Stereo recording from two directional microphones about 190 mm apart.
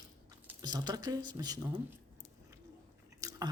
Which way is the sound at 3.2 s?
20° right (ahead or behind).